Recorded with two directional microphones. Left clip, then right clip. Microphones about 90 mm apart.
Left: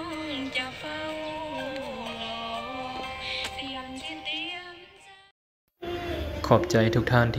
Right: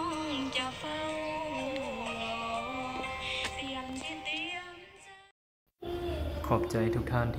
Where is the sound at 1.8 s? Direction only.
10° left (ahead or behind).